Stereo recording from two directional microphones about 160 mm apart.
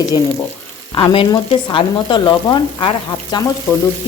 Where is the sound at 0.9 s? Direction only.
30° left (ahead or behind).